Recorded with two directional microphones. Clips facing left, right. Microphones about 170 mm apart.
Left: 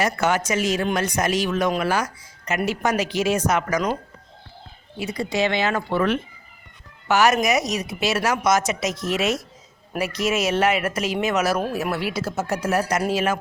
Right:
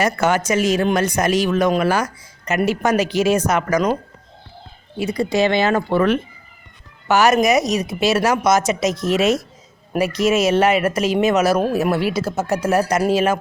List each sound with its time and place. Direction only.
0.0 s speech: 45° right (ahead or behind)
4.9 s a woman's voice: 45° right (ahead or behind)
7.1 s a woman's voice: 35° right (ahead or behind)